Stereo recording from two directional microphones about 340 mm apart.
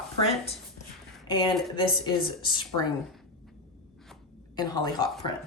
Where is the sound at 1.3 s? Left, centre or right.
Centre.